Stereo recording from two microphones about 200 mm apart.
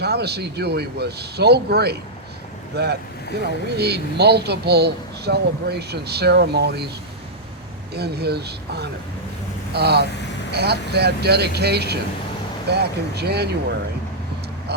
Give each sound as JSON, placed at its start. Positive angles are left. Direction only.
{"t": 0.0, "sound": "speech", "side_deg": -55}
{"t": 7.9, "sound": "speech", "side_deg": -55}
{"t": 14.7, "sound": "vehicle", "side_deg": -55}